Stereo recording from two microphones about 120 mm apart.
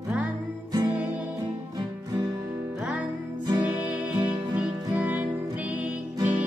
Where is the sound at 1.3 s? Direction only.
30° right (ahead or behind).